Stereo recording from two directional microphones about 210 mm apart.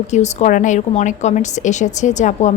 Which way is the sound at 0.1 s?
35° left (ahead or behind).